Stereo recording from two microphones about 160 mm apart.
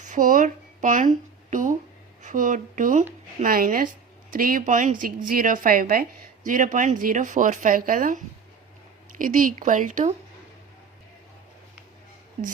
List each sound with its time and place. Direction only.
0.0 s a woman's voice: 55° right (ahead or behind)